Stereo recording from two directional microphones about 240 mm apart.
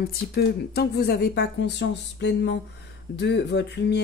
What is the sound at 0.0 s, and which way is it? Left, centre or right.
Speech, left.